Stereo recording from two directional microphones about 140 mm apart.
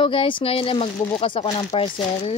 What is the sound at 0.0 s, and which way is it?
Speech, 40° left (ahead or behind).